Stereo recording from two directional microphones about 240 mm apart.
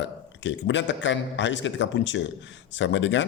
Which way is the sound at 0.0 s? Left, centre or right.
Left.